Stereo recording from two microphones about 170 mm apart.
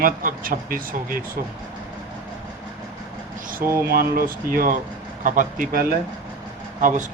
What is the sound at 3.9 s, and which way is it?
Speech, 60° right (ahead or behind).